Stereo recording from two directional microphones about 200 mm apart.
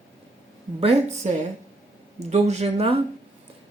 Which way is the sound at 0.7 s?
30° right (ahead or behind).